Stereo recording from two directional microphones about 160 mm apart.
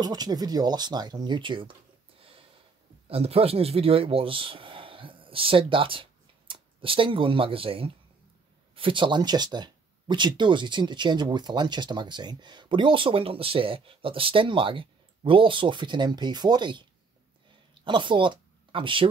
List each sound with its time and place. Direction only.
0.0 s speech: 25° right (ahead or behind)
17.8 s speech: 30° right (ahead or behind)